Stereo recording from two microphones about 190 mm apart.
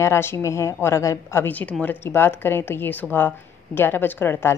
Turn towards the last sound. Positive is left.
turn(degrees=10)  # may be behind; listen again after turning